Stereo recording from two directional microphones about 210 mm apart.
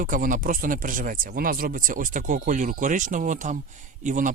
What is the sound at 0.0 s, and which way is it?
Speech, 40° right (ahead or behind).